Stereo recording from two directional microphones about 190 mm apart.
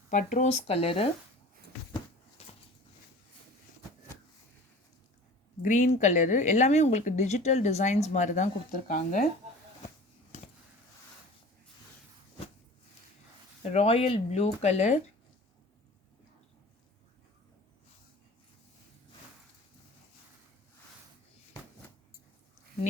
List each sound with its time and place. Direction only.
0.1 s speech: 40° left (ahead or behind)
2.4 s a sound: 30° left (ahead or behind)
5.6 s speech: 40° left (ahead or behind)
13.6 s speech: 35° left (ahead or behind)